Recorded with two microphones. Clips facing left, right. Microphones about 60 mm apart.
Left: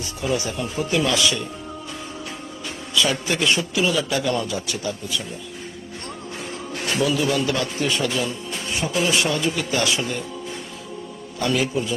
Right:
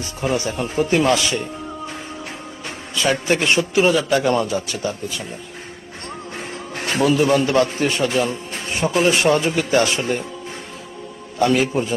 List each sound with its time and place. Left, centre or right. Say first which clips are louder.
0.0 s a man's voice: right 3 dB; right
2.6 s a man's voice: right 2 dB; right
6.7 s a man's voice: right 5 dB; right
11.3 s a man's voice: right 5 dB; right